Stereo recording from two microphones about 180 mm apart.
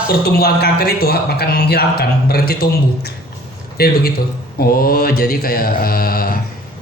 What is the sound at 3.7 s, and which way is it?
A man's voice, 60° left (ahead or behind).